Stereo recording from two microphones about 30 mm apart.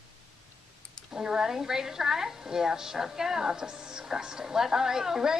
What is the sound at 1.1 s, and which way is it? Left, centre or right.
A woman's voice, right.